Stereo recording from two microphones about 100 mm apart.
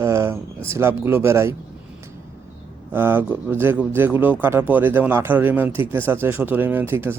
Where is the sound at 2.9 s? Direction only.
20° right (ahead or behind).